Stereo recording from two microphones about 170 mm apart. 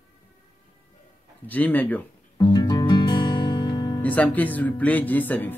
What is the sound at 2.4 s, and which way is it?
Music, 25° left (ahead or behind).